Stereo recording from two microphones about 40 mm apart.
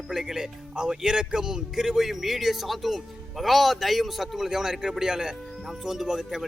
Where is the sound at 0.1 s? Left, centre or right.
Centre.